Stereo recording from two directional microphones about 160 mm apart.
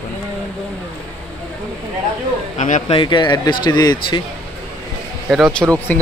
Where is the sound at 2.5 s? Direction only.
50° left (ahead or behind).